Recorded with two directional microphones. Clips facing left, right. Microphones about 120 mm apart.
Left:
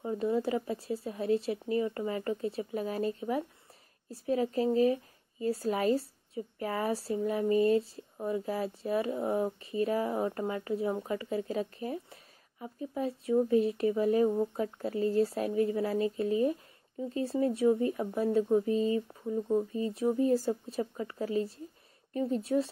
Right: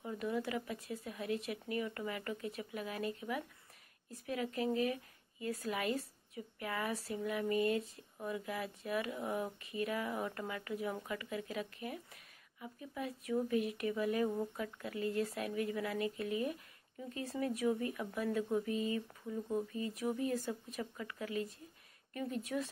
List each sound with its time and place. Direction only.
0.0 s speech: 30° left (ahead or behind)